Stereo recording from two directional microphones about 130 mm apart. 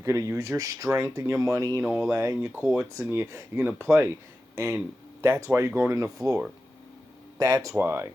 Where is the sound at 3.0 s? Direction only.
25° right (ahead or behind).